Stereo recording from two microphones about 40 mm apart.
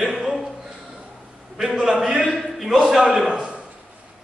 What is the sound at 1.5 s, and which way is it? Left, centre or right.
Speech, centre.